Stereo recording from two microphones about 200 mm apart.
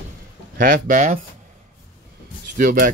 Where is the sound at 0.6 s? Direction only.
45° right (ahead or behind).